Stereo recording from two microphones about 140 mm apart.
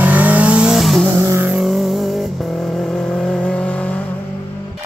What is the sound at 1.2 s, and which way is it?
Vehicle, 15° right (ahead or behind).